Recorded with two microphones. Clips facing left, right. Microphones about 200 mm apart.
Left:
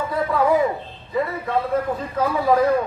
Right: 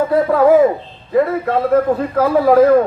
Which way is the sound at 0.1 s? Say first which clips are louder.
Right 7 dB; 60° right (ahead or behind).